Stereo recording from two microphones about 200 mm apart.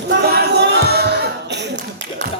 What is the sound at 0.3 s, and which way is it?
Clapping, 55° right (ahead or behind).